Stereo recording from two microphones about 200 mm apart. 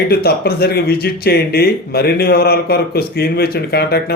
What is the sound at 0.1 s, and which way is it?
Speech, 50° left (ahead or behind).